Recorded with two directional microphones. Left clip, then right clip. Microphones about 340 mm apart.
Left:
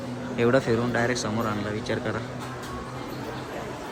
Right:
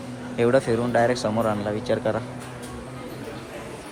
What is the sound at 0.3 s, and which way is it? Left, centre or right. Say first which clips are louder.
A man's voice: right 2 dB; centre.